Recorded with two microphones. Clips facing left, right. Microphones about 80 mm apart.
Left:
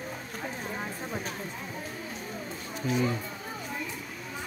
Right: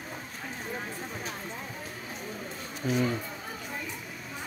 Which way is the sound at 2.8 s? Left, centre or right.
Right.